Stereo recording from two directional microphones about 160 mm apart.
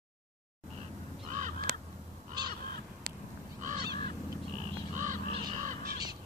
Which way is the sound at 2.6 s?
65° right (ahead or behind).